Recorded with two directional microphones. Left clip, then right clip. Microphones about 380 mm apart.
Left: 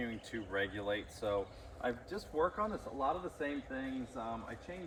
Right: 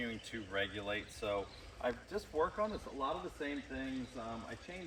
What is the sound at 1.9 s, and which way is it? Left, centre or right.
Speech, centre.